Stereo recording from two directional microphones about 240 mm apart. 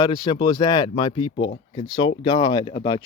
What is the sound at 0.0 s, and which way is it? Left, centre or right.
Speech, centre.